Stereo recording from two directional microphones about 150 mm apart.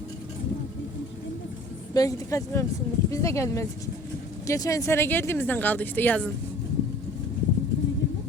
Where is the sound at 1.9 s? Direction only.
20° left (ahead or behind).